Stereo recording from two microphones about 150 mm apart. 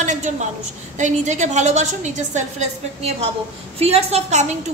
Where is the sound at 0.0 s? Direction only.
55° right (ahead or behind).